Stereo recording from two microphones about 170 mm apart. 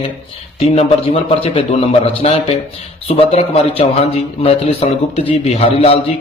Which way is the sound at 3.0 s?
35° left (ahead or behind).